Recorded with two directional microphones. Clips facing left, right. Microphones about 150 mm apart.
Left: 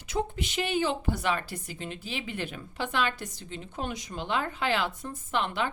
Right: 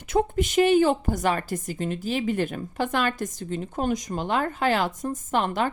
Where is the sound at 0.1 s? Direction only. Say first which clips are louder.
Right 8 dB; 50° right (ahead or behind).